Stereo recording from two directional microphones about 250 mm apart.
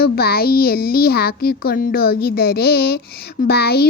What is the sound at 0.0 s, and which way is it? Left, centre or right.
A child's voice, left.